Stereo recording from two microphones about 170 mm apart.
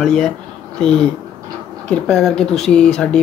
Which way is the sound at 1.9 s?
5° left (ahead or behind).